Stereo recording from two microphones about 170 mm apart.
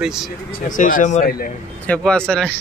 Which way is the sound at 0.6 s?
50° left (ahead or behind).